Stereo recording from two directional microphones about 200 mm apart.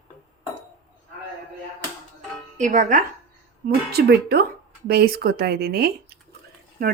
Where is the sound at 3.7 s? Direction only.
55° right (ahead or behind).